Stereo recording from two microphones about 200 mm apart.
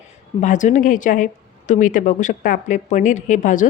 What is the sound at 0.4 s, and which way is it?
A woman's voice, 40° left (ahead or behind).